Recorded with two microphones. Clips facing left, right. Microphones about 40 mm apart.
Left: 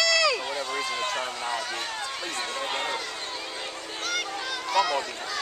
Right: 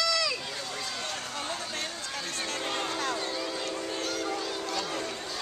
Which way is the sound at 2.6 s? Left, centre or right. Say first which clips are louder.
Left 3 dB; left.